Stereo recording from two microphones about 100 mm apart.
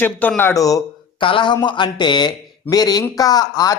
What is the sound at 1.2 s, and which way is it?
A man's voice, 55° left (ahead or behind).